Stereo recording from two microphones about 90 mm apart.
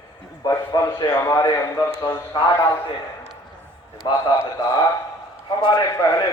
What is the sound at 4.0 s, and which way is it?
A man's voice, 55° left (ahead or behind).